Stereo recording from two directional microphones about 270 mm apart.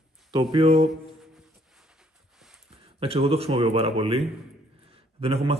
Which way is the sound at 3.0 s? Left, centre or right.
Right.